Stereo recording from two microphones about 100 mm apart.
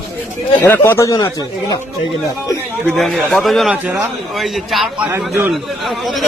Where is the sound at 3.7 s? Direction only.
15° right (ahead or behind).